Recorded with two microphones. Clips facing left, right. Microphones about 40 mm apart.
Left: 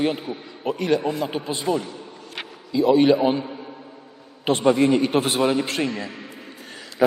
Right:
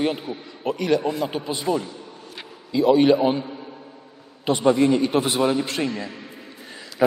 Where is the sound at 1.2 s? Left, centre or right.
Centre.